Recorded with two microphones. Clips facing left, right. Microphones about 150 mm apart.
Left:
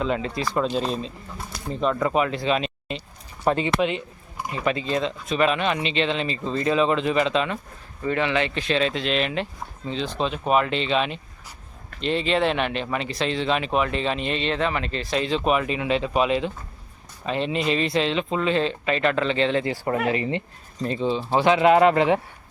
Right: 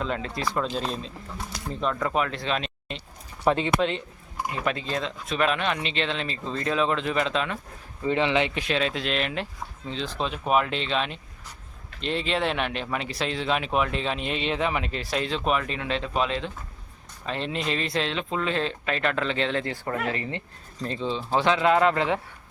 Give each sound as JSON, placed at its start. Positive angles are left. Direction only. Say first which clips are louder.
{"t": 0.0, "sound": "speech", "louder": "left 4 dB", "side_deg": 0}
{"t": 4.5, "sound": "speech", "louder": "left 5 dB", "side_deg": 0}
{"t": 8.0, "sound": "speech", "louder": "even", "side_deg": -20}